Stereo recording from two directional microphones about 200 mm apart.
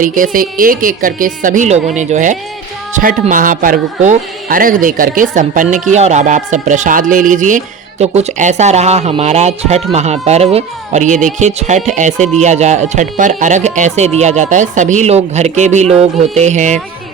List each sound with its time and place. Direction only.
0.0 s speech: 40° right (ahead or behind)